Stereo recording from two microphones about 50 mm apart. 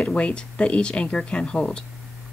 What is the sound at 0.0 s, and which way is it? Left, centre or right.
Speech, left.